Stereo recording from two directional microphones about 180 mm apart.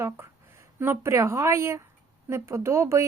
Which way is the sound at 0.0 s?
15° right (ahead or behind).